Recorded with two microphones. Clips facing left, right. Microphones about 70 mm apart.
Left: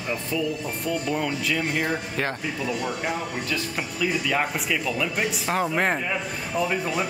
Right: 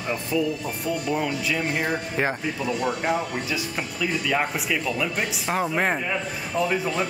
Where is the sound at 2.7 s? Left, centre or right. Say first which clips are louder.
Right 5 dB; centre.